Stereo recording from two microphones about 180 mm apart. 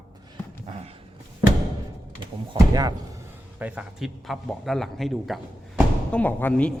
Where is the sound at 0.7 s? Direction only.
35° right (ahead or behind).